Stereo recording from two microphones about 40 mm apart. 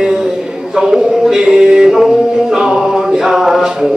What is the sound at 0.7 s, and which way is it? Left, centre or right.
Music, centre.